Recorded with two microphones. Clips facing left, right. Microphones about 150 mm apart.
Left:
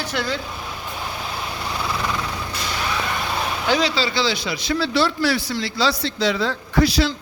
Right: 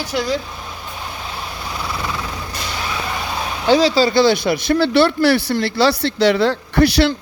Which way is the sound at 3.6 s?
35° right (ahead or behind).